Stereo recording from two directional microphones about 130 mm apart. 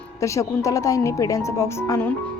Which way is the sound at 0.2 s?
25° left (ahead or behind).